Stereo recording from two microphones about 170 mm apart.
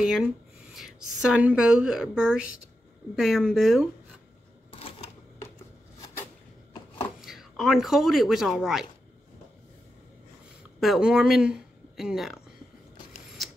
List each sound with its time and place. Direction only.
0.0 s a woman's voice: 5° right (ahead or behind)
4.7 s cash register: 35° left (ahead or behind)
7.2 s speech: centre (ahead or behind)
10.8 s speech: 5° right (ahead or behind)